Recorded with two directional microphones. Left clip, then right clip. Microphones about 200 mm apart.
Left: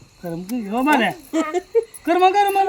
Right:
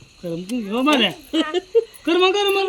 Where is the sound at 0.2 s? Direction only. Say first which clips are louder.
Right 1 dB; 20° left (ahead or behind).